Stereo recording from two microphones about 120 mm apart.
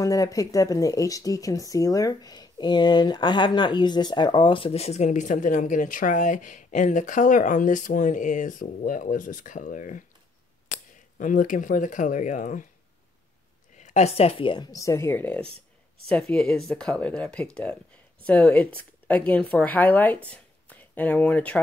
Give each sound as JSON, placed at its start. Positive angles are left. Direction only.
{"t": 0.0, "sound": "speech", "side_deg": 30}
{"t": 13.8, "sound": "speech", "side_deg": 65}
{"t": 20.2, "sound": "a sound", "side_deg": 10}